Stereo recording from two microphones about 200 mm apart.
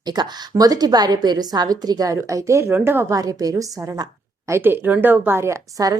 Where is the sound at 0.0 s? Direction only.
20° right (ahead or behind).